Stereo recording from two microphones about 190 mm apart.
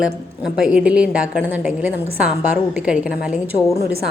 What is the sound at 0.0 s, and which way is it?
A woman's voice, 5° right (ahead or behind).